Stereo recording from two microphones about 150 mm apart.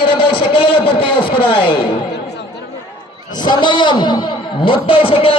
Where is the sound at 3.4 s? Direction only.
30° left (ahead or behind).